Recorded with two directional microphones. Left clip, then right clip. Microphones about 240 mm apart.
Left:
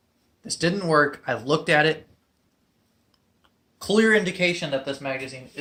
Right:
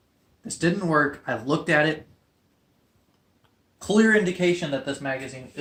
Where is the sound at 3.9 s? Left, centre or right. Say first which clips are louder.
Left 1 dB; left.